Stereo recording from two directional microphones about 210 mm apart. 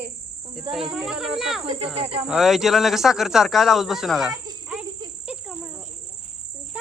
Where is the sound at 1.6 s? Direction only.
25° right (ahead or behind).